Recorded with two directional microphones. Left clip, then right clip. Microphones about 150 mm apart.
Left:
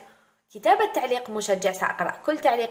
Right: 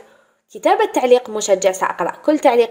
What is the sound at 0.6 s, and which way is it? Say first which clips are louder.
A woman's voice: right 6 dB; 50° right (ahead or behind).